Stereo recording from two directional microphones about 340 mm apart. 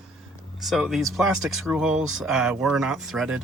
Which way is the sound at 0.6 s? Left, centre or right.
Centre.